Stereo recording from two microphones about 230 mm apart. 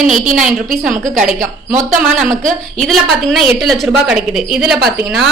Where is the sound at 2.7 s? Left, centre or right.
Centre.